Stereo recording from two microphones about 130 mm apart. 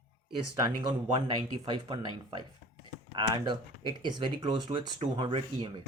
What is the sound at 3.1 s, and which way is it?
Speech, 35° right (ahead or behind).